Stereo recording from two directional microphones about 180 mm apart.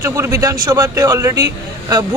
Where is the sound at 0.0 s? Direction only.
15° right (ahead or behind).